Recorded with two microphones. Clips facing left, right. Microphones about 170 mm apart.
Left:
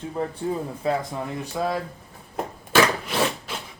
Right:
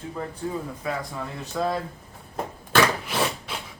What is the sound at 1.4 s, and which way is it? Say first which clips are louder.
Speech: right 1 dB; 10° left (ahead or behind).